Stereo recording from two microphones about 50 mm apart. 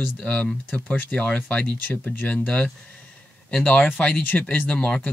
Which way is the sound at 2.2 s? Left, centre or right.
Left.